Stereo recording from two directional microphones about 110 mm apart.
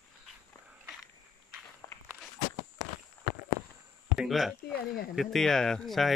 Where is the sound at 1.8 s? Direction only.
30° left (ahead or behind).